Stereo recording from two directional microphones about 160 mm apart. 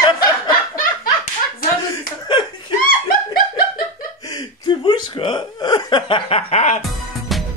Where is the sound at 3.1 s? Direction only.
60° left (ahead or behind).